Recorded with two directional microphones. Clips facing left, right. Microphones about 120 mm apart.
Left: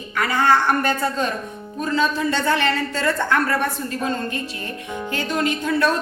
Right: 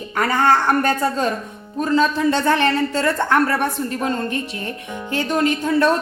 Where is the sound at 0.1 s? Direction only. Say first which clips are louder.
Right 1 dB; 40° right (ahead or behind).